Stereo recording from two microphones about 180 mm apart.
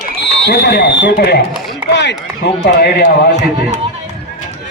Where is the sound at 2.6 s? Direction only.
65° left (ahead or behind).